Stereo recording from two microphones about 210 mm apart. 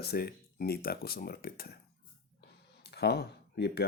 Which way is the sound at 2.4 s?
50° left (ahead or behind).